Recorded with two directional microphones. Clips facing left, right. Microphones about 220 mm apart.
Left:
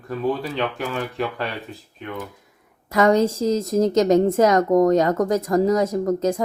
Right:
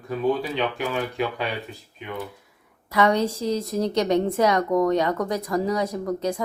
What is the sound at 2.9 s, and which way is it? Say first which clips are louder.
A woman's voice: left 4 dB; 45° left (ahead or behind).